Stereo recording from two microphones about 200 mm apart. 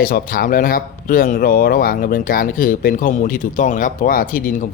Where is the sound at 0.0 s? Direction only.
45° left (ahead or behind).